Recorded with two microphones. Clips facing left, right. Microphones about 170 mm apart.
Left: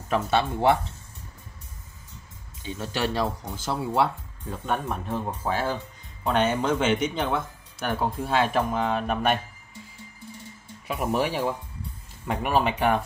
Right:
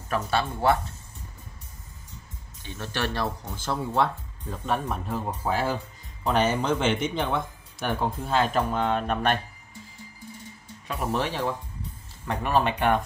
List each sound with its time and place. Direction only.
0.1 s speech: 20° left (ahead or behind)
2.6 s speech: 10° left (ahead or behind)
10.9 s speech: 10° left (ahead or behind)